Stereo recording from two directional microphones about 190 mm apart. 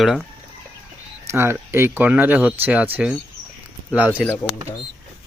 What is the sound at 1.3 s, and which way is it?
Speech, 15° right (ahead or behind).